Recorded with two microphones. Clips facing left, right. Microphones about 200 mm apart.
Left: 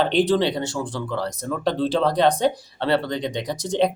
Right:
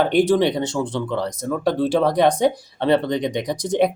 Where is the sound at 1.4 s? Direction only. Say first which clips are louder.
Right 3 dB; 10° right (ahead or behind).